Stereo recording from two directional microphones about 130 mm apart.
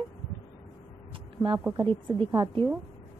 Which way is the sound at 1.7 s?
40° right (ahead or behind).